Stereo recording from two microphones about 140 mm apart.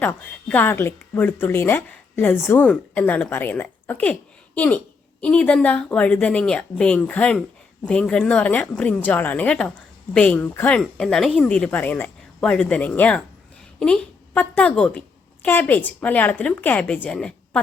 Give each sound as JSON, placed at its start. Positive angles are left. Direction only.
{"t": 0.0, "sound": "a woman's voice", "side_deg": 10}